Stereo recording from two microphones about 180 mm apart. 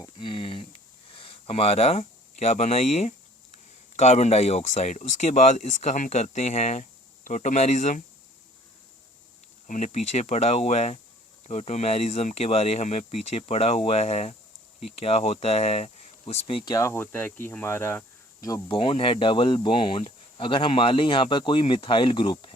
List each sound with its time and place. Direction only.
0.0 s speech: 25° left (ahead or behind); by 8.0 s 40° left (ahead or behind)
9.6 s speech: 40° left (ahead or behind); by 18.8 s 20° left (ahead or behind)
18.8 s speech: 30° left (ahead or behind)